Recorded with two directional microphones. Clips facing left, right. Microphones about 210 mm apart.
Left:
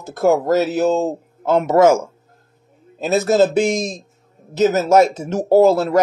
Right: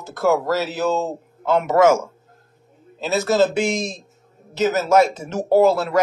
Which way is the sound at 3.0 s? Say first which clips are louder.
Left 3 dB; 50° left (ahead or behind).